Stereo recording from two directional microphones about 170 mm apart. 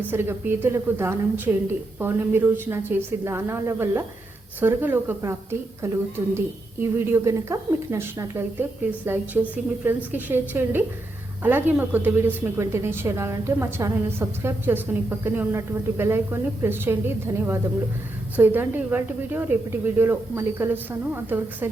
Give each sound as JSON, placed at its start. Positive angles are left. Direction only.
{"t": 0.0, "sound": "a woman's voice", "side_deg": -10}